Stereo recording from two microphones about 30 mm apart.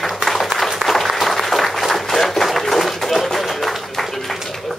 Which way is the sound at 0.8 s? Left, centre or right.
Centre.